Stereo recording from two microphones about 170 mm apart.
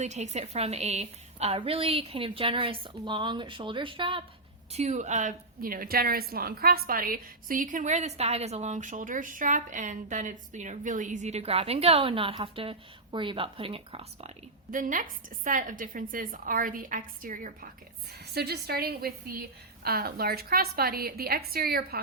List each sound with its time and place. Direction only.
0.0 s a woman's voice: 40° right (ahead or behind)
14.7 s a woman's voice: 50° right (ahead or behind)
18.3 s a woman's voice: 70° right (ahead or behind)